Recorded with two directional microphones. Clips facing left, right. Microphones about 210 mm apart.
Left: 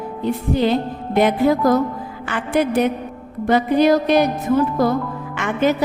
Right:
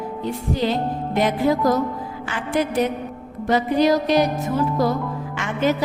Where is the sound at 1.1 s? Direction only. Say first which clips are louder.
Left 4 dB; 60° left (ahead or behind).